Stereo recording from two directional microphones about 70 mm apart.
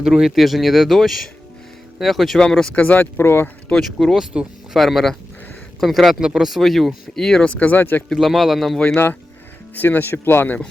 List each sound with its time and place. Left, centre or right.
0.0 s speech: centre
2.7 s speech: left
3.9 s speech: centre
4.8 s speech: centre; by 8.0 s left
8.1 s speech: centre
9.7 s speech: left